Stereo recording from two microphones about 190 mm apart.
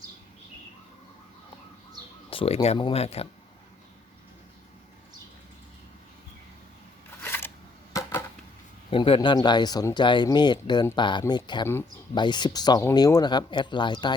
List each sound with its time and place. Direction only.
2.3 s speech: 30° left (ahead or behind)
7.2 s a sound: 10° left (ahead or behind)
8.9 s speech: 30° left (ahead or behind)